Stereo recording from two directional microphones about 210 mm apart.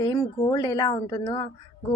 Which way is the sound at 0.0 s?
20° left (ahead or behind).